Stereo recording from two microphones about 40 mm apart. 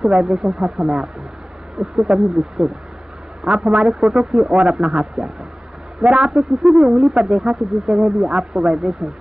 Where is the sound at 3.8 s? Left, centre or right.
Centre.